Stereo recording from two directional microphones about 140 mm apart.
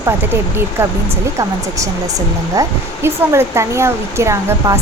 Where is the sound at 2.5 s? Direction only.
20° right (ahead or behind).